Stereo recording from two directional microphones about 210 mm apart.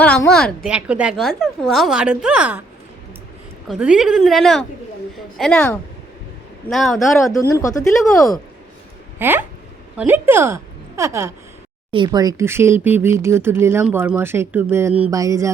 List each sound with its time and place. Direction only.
0.0 s a woman's voice: 5° left (ahead or behind)
3.7 s a woman's voice: 5° right (ahead or behind)
7.3 s speech: 15° left (ahead or behind)
9.1 s a woman's voice: 10° right (ahead or behind)